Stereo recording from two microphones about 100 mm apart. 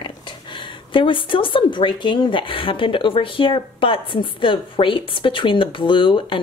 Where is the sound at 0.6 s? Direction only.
55° left (ahead or behind).